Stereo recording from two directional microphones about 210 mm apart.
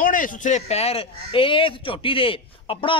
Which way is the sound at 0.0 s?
40° left (ahead or behind).